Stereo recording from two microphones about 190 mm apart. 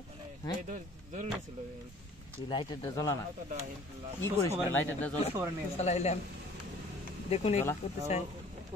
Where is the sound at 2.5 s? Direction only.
25° left (ahead or behind).